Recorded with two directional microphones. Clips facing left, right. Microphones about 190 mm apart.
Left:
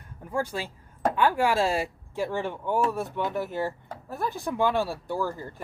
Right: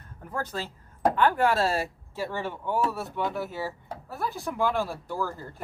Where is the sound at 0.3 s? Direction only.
10° left (ahead or behind).